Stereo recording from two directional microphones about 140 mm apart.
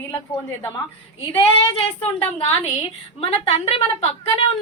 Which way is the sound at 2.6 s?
45° left (ahead or behind).